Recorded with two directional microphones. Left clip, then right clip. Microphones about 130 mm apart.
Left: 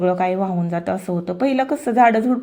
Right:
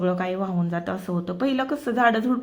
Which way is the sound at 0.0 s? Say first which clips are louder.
Left 7 dB; 25° left (ahead or behind).